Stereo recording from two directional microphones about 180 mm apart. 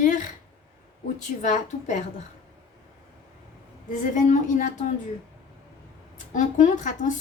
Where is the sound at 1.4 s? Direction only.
45° left (ahead or behind).